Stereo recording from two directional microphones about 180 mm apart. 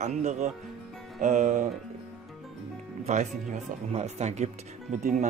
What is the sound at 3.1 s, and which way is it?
Speech, 40° right (ahead or behind).